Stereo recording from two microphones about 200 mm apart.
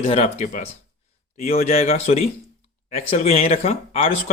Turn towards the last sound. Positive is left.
turn(degrees=30)  # may be behind; listen again after turning